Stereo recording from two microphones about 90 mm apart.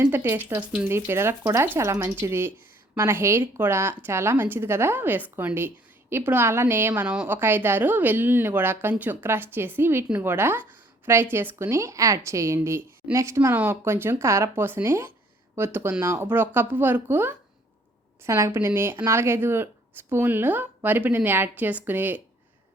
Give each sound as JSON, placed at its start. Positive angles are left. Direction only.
{"t": 0.1, "sound": "speech", "side_deg": -20}
{"t": 11.8, "sound": "a woman's voice", "side_deg": -35}
{"t": 13.5, "sound": "speech", "side_deg": -20}